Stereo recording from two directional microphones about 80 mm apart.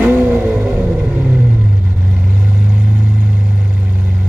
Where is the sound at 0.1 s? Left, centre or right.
Right.